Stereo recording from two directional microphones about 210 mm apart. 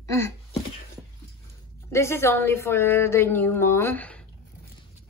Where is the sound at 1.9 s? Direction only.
15° left (ahead or behind).